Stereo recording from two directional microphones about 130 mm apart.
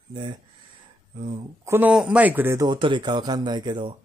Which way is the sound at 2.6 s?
40° right (ahead or behind).